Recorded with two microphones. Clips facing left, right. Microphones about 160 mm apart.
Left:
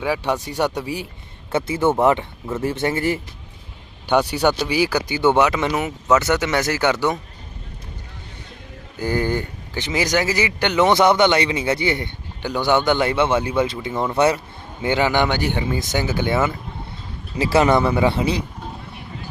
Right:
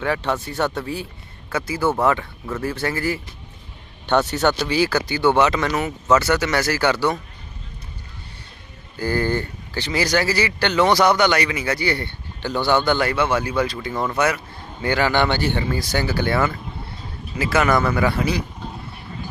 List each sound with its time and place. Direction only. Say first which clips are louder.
0.0 s speech: left 1 dB; 10° left (ahead or behind)
4.0 s speech: left 1 dB; 10° left (ahead or behind)
9.0 s speech: even; 15° left (ahead or behind)
17.3 s speech: left 3 dB; 30° left (ahead or behind)